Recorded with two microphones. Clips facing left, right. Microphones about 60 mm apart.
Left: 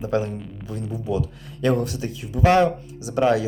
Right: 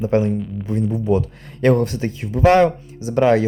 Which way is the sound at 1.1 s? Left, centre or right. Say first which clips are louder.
Right 6 dB; right.